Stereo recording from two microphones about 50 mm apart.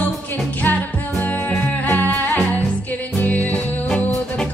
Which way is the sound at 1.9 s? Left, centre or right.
Left.